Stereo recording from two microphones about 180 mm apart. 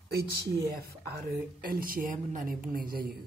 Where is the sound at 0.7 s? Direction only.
60° right (ahead or behind).